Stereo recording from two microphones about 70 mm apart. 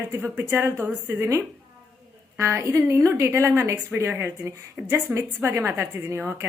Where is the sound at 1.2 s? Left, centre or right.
Right.